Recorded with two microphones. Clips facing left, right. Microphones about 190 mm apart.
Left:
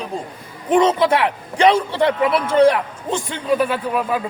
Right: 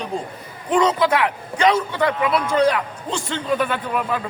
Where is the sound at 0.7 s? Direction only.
25° left (ahead or behind).